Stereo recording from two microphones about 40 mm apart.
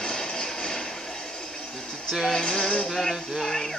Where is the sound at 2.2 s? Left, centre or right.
Centre.